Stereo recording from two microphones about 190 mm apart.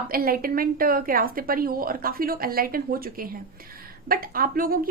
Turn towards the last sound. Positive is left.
turn(degrees=-50)  # may be behind; listen again after turning